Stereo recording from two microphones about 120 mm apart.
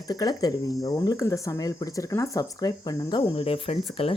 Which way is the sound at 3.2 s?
50° left (ahead or behind).